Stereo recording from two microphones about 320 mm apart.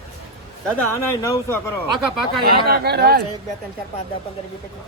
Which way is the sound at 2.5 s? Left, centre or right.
Right.